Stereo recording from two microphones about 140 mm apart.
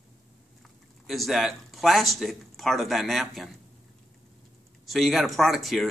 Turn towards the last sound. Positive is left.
turn(degrees=0)  # may be behind; listen again after turning